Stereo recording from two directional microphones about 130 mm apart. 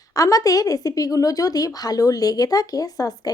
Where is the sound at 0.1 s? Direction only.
25° left (ahead or behind).